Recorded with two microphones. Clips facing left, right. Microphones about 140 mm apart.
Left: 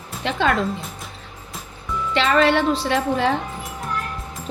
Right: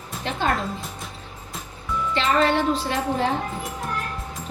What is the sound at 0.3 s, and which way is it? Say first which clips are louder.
Speech: left 4 dB; 90° left.